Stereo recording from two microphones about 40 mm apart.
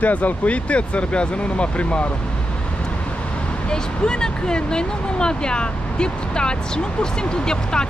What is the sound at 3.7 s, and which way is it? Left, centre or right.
Speech, left.